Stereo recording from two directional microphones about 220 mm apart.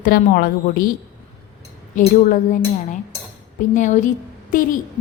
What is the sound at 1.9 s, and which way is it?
Speech, 35° left (ahead or behind).